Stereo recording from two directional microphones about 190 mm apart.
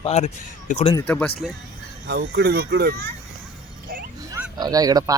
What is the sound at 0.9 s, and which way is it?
Speech, 10° left (ahead or behind).